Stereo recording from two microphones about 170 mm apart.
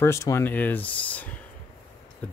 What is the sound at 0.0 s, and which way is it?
Speech, 15° left (ahead or behind).